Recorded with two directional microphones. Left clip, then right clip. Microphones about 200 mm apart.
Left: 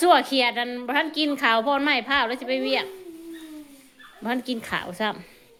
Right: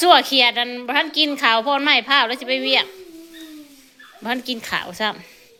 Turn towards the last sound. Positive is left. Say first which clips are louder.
# right 4 dB
turn(degrees=10)  # may be behind; listen again after turning